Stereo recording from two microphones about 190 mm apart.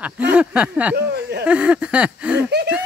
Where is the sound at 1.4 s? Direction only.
5° right (ahead or behind).